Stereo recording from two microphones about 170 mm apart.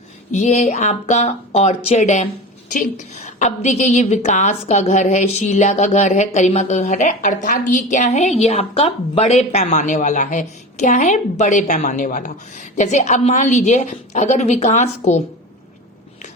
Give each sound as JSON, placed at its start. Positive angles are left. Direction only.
{"t": 0.3, "sound": "a woman's voice", "side_deg": 45}